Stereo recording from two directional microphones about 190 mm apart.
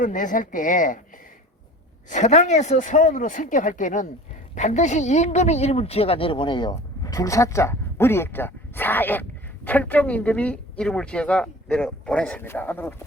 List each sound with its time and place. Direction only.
0.0 s speech: 45° left (ahead or behind)
2.0 s a woman's voice: 40° left (ahead or behind); by 12.9 s 10° left (ahead or behind)